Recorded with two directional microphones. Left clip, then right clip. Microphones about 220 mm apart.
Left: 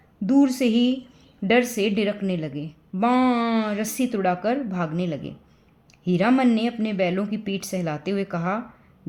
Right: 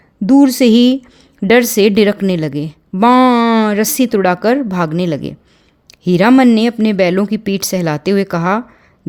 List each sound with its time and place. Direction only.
0.3 s a woman's voice: 45° right (ahead or behind)